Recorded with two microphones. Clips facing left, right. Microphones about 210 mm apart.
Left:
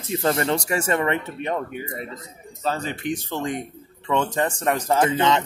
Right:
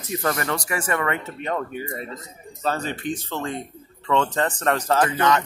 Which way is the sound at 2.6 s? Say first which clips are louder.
Even; 10° left (ahead or behind).